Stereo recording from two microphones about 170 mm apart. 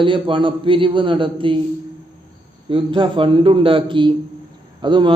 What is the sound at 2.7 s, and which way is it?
A man's voice, 30° right (ahead or behind).